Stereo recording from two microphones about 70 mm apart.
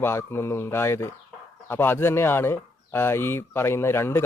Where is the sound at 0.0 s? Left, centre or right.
Left.